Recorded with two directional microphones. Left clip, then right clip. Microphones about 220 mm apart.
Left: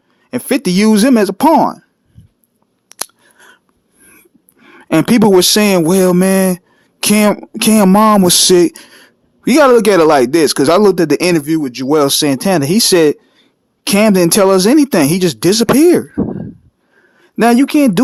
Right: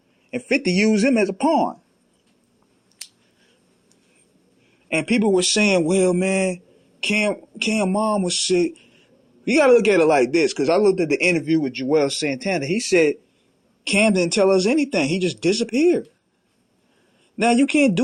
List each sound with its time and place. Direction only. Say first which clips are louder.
0.3 s speech: left 6 dB; 35° left (ahead or behind)
4.9 s speech: left 10 dB; 35° left (ahead or behind)
7.9 s a sound: left 14 dB; 60° left (ahead or behind)
8.2 s speech: left 11 dB; 40° left (ahead or behind)
17.2 s speech: left 8 dB; 35° left (ahead or behind)